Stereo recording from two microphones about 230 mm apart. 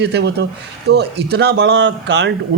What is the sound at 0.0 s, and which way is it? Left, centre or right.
Speech, right.